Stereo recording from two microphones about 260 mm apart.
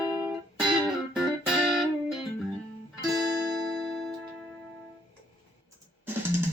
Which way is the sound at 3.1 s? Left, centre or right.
Centre.